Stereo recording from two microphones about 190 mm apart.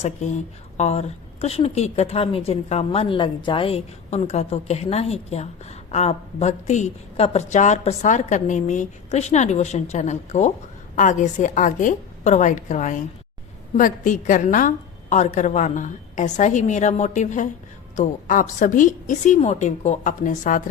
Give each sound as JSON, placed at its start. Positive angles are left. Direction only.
{"t": 0.0, "sound": "a woman's voice", "side_deg": 35}